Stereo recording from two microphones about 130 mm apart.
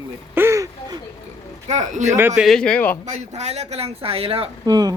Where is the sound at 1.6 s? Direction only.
65° right (ahead or behind).